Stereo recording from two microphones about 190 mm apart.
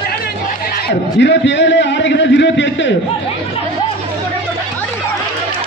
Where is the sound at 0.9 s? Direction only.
65° left (ahead or behind).